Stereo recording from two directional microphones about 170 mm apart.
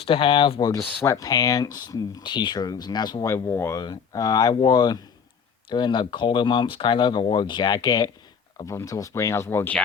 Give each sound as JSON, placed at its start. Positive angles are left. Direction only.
{"t": 0.0, "sound": "speech", "side_deg": 30}
{"t": 0.7, "sound": "speech", "side_deg": 20}